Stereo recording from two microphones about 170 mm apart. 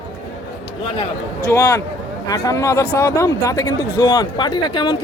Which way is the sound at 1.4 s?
20° left (ahead or behind).